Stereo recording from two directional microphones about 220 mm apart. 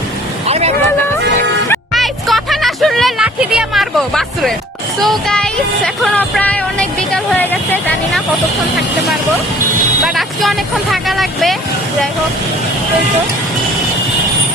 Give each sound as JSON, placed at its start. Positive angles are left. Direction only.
{"t": 0.4, "sound": "vehicle", "side_deg": -30}
{"t": 1.9, "sound": "music", "side_deg": 0}
{"t": 10.0, "sound": "music", "side_deg": 0}
{"t": 10.9, "sound": "vehicle", "side_deg": 0}